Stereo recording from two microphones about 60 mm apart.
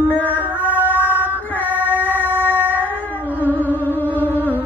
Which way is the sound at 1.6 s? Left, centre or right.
Right.